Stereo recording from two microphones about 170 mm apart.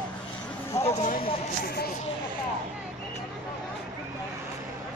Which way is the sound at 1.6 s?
65° left (ahead or behind).